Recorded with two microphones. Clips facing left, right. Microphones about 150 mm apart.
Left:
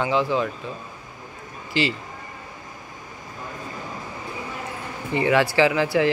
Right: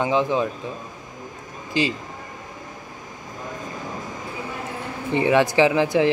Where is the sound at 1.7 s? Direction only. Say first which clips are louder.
Right 1 dB; 15° right (ahead or behind).